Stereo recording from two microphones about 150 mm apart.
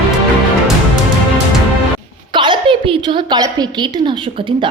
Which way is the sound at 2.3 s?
30° right (ahead or behind).